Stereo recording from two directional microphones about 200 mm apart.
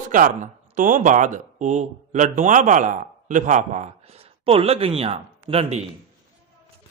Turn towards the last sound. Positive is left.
turn(degrees=-30)  # may be behind; listen again after turning